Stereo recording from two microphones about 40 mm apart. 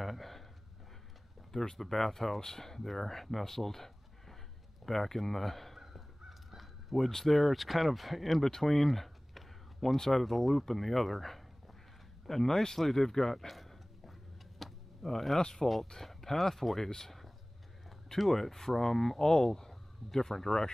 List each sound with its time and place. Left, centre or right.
0.0 s a sound: centre
1.5 s speech: centre
5.8 s crow: centre
7.1 s speech: centre
7.3 s speech: centre
8.5 s a sound: centre
9.9 s speech: centre
14.6 s a sound: centre
15.3 s speech: centre